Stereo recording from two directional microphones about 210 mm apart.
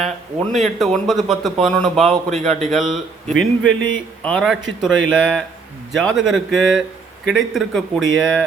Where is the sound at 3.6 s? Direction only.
65° right (ahead or behind).